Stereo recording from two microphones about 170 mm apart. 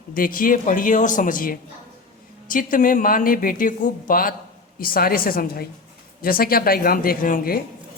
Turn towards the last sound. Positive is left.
turn(degrees=55)  # may be behind; listen again after turning